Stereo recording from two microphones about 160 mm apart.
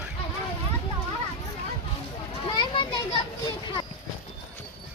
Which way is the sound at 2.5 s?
30° left (ahead or behind).